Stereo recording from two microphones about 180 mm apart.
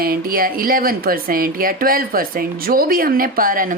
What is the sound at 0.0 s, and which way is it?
Speech, 55° right (ahead or behind).